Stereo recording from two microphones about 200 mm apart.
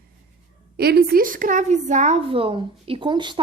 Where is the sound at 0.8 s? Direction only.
50° right (ahead or behind).